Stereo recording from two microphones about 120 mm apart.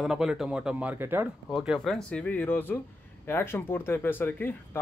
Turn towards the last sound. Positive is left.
turn(degrees=15)  # may be behind; listen again after turning